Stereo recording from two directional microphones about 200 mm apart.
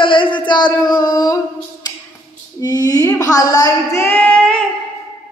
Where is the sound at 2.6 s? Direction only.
20° left (ahead or behind).